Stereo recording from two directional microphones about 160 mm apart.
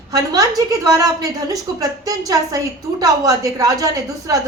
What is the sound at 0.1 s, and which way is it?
Speech, 20° right (ahead or behind).